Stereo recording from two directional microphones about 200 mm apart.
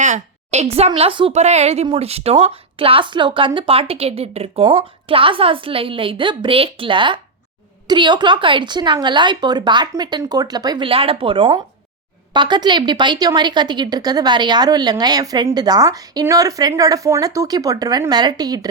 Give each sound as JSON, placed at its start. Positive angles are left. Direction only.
{"t": 0.0, "sound": "a woman's voice", "side_deg": -35}